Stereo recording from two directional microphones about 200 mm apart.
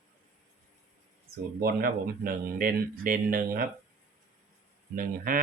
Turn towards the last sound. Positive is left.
turn(degrees=-45)  # may be behind; listen again after turning